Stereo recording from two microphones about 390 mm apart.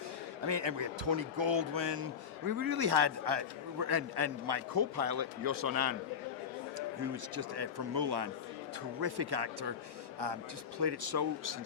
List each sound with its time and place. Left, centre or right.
0.4 s speech: right
2.5 s a man's voice: right
7.0 s speech: right
10.8 s a man's voice: right